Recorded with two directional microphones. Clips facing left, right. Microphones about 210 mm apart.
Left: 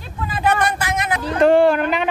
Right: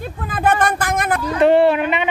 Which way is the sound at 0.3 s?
50° right (ahead or behind).